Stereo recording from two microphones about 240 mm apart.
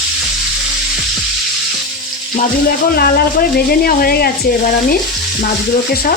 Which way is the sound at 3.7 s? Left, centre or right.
Left.